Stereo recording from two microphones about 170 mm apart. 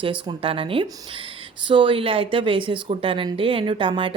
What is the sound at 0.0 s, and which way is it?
Speech, 30° right (ahead or behind).